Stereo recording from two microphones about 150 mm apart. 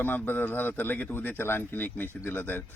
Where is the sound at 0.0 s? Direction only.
15° left (ahead or behind).